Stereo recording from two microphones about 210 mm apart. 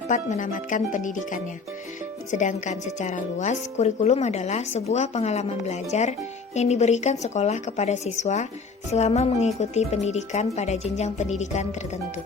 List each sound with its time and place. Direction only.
0.1 s speech: 35° left (ahead or behind)